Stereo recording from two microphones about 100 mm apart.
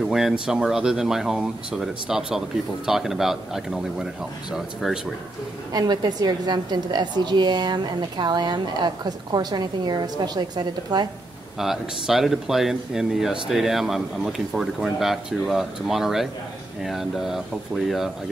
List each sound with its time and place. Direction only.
0.1 s speech: 5° right (ahead or behind)
5.7 s a woman's voice: 40° right (ahead or behind)
11.5 s speech: 5° right (ahead or behind)